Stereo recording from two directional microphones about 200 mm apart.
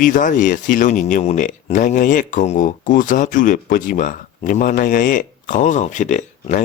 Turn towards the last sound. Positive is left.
turn(degrees=40)  # may be behind; listen again after turning